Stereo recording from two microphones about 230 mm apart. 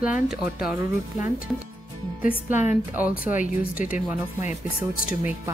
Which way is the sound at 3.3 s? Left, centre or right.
Left.